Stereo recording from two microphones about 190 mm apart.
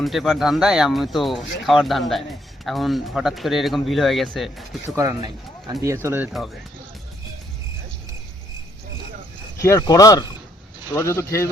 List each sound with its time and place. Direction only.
0.0 s speech: centre (ahead or behind)
4.9 s speech: 20° right (ahead or behind)
9.6 s speech: 15° left (ahead or behind)